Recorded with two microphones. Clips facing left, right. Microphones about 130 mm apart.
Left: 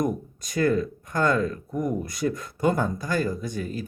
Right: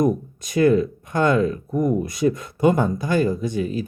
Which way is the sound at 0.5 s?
20° right (ahead or behind).